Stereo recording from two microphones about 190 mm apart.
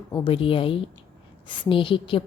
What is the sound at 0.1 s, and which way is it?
A woman's voice, 30° left (ahead or behind).